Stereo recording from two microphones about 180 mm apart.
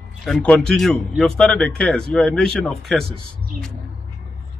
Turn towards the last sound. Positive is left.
turn(degrees=0)  # may be behind; listen again after turning